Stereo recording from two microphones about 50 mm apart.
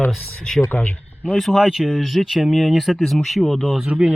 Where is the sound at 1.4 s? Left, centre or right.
Centre.